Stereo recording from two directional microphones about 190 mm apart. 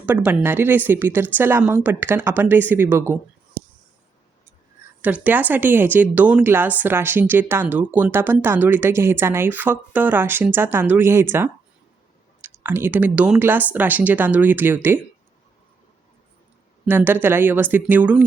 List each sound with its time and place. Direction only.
0.0 s speech: 10° right (ahead or behind)
5.0 s speech: 10° right (ahead or behind)
16.8 s speech: 10° right (ahead or behind)